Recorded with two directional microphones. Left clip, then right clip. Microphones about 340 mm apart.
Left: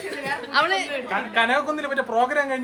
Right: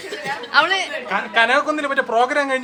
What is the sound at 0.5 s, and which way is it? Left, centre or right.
Speech, centre.